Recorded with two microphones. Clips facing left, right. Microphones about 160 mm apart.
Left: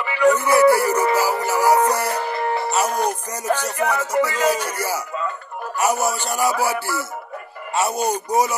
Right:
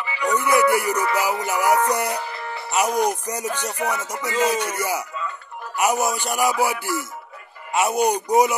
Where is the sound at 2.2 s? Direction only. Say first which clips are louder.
Left 8 dB; 60° left (ahead or behind).